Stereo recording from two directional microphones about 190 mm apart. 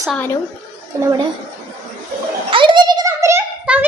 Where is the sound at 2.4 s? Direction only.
25° right (ahead or behind).